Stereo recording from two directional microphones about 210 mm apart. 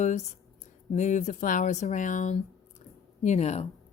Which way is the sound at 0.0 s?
35° left (ahead or behind).